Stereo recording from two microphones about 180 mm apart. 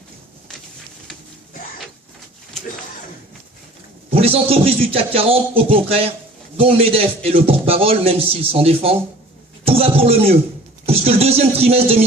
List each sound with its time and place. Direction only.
4.1 s a man's voice: 30° right (ahead or behind)